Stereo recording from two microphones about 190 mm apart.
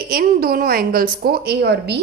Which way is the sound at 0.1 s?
50° right (ahead or behind).